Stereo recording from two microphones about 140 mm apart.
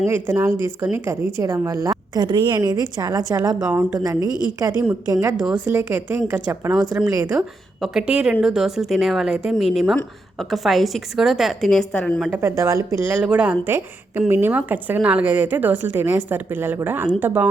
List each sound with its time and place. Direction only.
0.1 s a woman's voice: 20° right (ahead or behind)
3.6 s speech: 10° right (ahead or behind)
3.9 s a woman's voice: 25° right (ahead or behind)
5.6 s a woman's voice: 15° right (ahead or behind)
7.3 s speech: 5° right (ahead or behind)
12.3 s speech: 15° right (ahead or behind)